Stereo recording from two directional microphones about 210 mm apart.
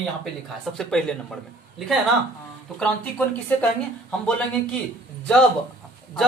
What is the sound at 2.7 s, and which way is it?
Speech, 10° left (ahead or behind).